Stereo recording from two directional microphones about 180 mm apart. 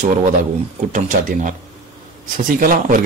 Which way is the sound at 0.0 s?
45° right (ahead or behind).